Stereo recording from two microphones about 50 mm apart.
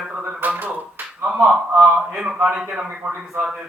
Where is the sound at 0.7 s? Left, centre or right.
Right.